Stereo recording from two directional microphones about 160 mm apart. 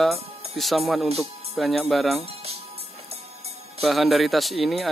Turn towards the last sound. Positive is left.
turn(degrees=0)  # may be behind; listen again after turning